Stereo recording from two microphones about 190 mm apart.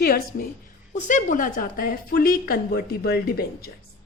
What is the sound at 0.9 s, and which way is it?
A woman's voice, 40° left (ahead or behind).